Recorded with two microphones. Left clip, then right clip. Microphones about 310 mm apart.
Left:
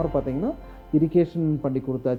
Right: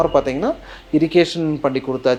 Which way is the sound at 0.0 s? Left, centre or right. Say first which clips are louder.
Right 9 dB; centre.